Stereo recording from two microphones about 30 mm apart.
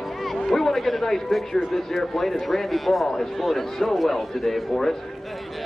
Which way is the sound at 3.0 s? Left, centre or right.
Centre.